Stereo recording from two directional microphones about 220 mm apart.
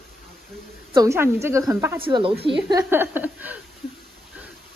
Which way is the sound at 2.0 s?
25° right (ahead or behind).